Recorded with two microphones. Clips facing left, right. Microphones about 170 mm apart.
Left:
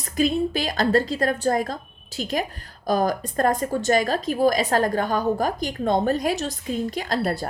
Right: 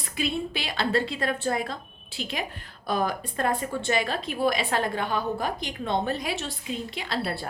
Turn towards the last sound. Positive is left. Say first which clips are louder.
# left 6 dB
turn(degrees=45)  # may be behind; listen again after turning